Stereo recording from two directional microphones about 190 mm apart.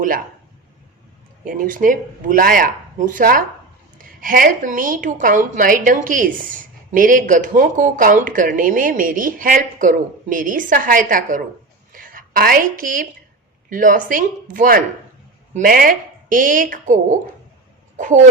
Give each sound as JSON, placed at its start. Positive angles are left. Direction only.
{"t": 1.5, "sound": "a woman's voice", "side_deg": -45}
{"t": 11.9, "sound": "a sound", "side_deg": -45}
{"t": 13.7, "sound": "a woman's voice", "side_deg": -45}